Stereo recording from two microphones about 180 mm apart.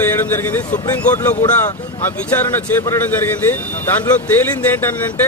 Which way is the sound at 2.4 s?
15° left (ahead or behind).